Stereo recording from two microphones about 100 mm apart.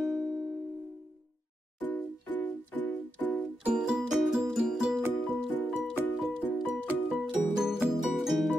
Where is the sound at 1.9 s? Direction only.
15° left (ahead or behind).